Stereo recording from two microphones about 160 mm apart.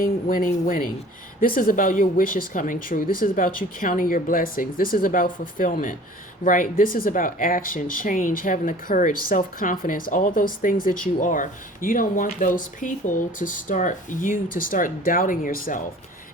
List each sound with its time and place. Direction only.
0.0 s speech: 60° left (ahead or behind)